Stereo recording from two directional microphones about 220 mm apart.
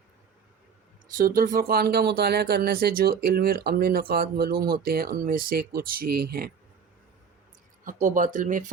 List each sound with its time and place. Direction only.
1.1 s speech: 40° right (ahead or behind)
7.9 s speech: 35° right (ahead or behind)